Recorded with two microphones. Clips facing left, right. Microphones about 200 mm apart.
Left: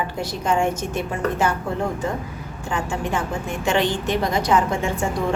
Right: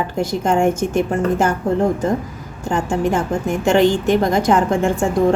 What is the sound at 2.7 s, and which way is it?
A woman's voice, 40° right (ahead or behind).